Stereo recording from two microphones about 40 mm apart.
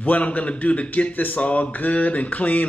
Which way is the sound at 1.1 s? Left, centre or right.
Left.